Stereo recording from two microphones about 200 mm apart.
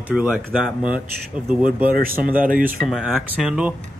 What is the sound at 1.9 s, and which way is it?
Speech, 45° right (ahead or behind).